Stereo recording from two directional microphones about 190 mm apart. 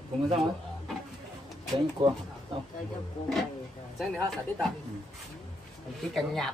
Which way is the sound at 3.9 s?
Centre (ahead or behind).